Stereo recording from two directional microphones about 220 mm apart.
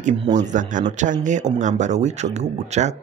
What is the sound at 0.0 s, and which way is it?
Speech, 25° right (ahead or behind).